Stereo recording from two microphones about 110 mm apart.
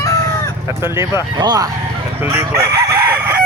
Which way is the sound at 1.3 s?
40° right (ahead or behind).